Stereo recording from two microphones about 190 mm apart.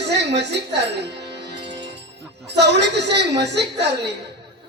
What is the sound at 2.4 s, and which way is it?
A man's voice, 60° right (ahead or behind).